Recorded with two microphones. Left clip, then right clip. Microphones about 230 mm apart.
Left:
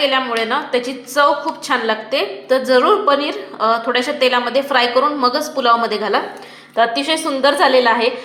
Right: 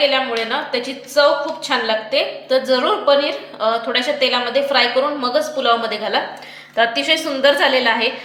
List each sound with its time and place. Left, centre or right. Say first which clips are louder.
0.0 s a woman's voice: even; left
6.7 s a woman's voice: even; centre